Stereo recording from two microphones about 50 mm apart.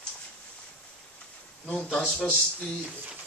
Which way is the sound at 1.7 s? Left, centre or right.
Centre.